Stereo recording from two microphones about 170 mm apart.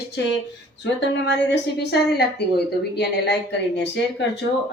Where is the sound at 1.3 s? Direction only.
85° left.